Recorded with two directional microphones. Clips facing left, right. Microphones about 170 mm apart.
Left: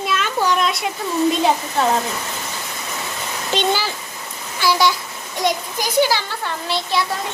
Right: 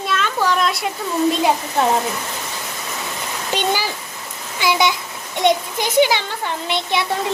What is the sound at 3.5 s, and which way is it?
A child's voice, 10° right (ahead or behind).